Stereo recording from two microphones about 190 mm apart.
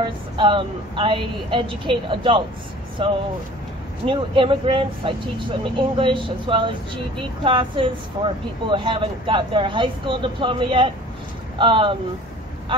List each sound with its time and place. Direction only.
0.0 s speech: 25° right (ahead or behind)